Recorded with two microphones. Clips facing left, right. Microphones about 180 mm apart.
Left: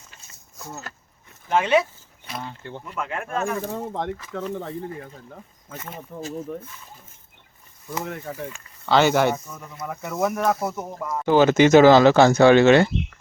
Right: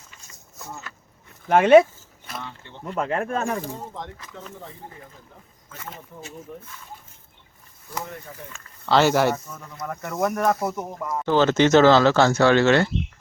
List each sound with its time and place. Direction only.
0.9 s a sound: 40° left (ahead or behind)
1.5 s speech: 55° right (ahead or behind)
2.4 s speech: 45° left (ahead or behind)
2.8 s speech: 40° right (ahead or behind)
4.3 s speech: 65° left (ahead or behind)
6.1 s speech: 60° left (ahead or behind)
8.9 s speech: centre (ahead or behind)
11.3 s speech: 15° left (ahead or behind)